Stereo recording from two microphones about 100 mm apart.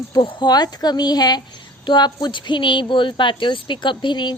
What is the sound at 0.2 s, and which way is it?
A woman's voice, 55° left (ahead or behind).